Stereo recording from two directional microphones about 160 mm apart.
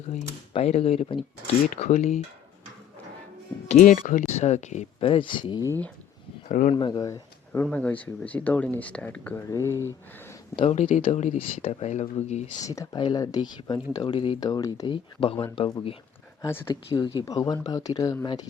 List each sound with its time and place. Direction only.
0.1 s speech: 40° left (ahead or behind)
1.7 s speech: 45° left (ahead or behind)
3.7 s speech: 55° left (ahead or behind)
4.3 s speech: 45° left (ahead or behind)
5.0 s speech: 30° left (ahead or behind)
6.5 s speech: 55° left (ahead or behind)
6.7 s speech: 25° left (ahead or behind)
10.5 s speech: 35° left (ahead or behind)
12.6 s speech: 20° left (ahead or behind)
15.2 s speech: 35° left (ahead or behind)
16.4 s speech: 15° left (ahead or behind)
16.9 s speech: 25° left (ahead or behind)